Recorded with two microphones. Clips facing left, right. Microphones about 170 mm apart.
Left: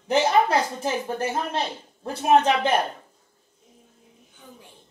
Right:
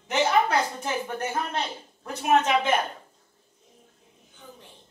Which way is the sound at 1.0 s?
30° left (ahead or behind).